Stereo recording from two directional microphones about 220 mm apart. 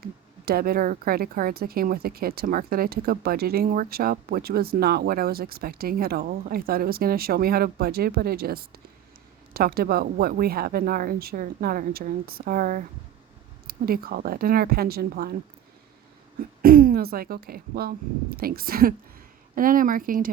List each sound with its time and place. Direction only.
0.0 s speech: 45° right (ahead or behind)
16.6 s speech: 40° right (ahead or behind)